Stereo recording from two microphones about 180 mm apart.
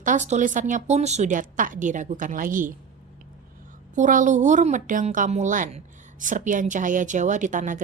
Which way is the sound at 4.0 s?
45° right (ahead or behind).